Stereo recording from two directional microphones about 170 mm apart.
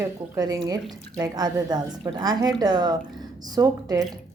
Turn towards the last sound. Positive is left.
turn(degrees=-20)  # may be behind; listen again after turning